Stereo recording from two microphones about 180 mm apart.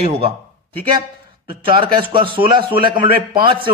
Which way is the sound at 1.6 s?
30° right (ahead or behind).